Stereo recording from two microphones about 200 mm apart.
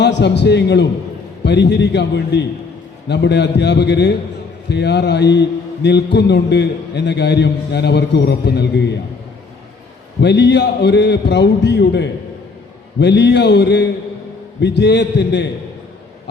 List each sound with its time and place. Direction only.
0.0 s a man's voice: 60° left (ahead or behind)
10.2 s a man's voice: 60° left (ahead or behind)